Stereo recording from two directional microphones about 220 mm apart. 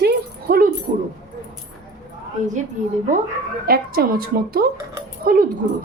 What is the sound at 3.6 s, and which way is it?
Speech, 45° right (ahead or behind).